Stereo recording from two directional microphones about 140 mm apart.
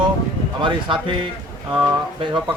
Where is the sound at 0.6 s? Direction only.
35° right (ahead or behind).